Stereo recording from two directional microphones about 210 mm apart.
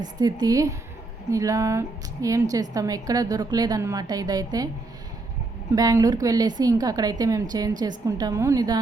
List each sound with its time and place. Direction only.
0.0 s a woman's voice: 20° right (ahead or behind)
5.7 s a woman's voice: 15° right (ahead or behind)